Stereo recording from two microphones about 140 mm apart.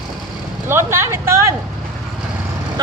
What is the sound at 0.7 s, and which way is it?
Speech, 20° right (ahead or behind).